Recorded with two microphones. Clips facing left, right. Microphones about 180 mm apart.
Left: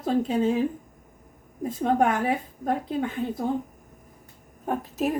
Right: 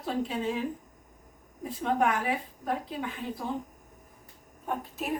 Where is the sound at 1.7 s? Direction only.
45° left (ahead or behind).